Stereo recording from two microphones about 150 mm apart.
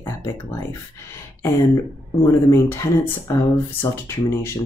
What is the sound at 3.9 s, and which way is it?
Speech, 15° left (ahead or behind).